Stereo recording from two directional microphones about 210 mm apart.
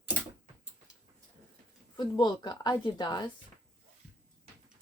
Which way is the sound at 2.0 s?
20° left (ahead or behind).